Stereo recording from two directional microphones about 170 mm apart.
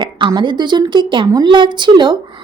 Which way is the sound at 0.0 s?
25° right (ahead or behind).